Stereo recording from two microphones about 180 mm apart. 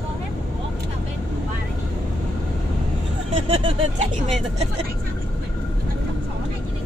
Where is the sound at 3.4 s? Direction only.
35° right (ahead or behind).